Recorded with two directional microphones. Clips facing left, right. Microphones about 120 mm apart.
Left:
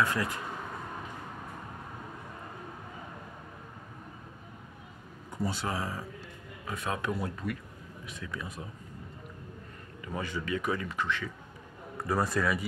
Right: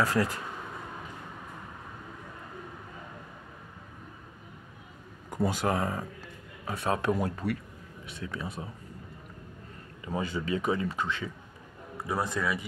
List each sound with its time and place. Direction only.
0.0 s a man's voice: 35° right (ahead or behind)
5.4 s speech: 50° right (ahead or behind)
6.7 s a man's voice: 30° right (ahead or behind)
10.0 s speech: 25° right (ahead or behind)
12.1 s a man's voice: centre (ahead or behind)